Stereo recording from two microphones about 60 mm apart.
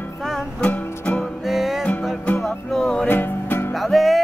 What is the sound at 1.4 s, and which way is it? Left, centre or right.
Music, centre.